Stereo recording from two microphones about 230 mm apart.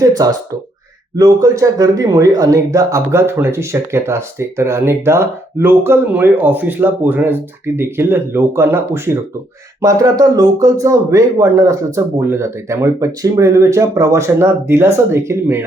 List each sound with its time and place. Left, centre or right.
0.0 s speech: centre